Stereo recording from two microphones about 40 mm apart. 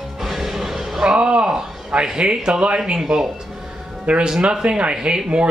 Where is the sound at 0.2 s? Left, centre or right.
Centre.